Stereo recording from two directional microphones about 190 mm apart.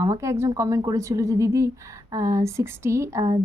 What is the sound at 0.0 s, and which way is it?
A woman's voice, 15° right (ahead or behind).